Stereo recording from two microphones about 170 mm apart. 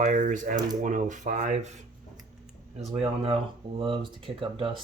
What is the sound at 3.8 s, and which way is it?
Speech, 30° right (ahead or behind).